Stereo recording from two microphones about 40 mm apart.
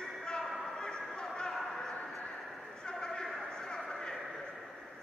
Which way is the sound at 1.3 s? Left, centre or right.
Centre.